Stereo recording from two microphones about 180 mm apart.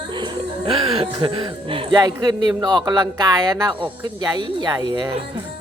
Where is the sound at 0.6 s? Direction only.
30° right (ahead or behind).